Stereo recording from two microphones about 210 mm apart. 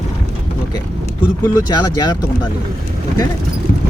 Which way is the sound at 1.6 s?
20° left (ahead or behind).